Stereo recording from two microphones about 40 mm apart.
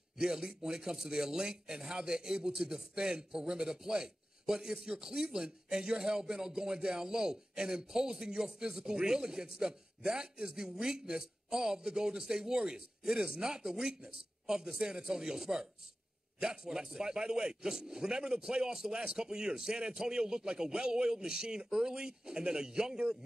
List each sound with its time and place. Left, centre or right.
0.2 s speech: centre